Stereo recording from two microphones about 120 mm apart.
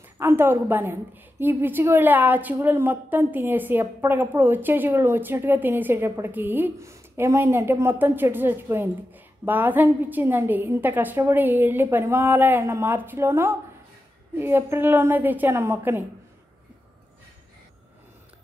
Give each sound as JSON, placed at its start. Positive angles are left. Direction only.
{"t": 0.0, "sound": "a woman's voice", "side_deg": -20}